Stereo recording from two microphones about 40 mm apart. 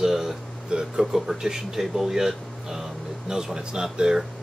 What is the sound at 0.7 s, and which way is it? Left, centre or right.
Speech, centre.